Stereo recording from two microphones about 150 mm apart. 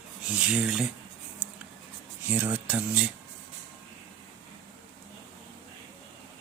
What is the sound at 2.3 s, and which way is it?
Speech, 10° right (ahead or behind).